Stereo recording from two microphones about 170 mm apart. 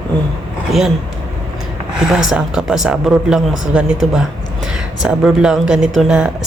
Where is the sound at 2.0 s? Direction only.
5° right (ahead or behind).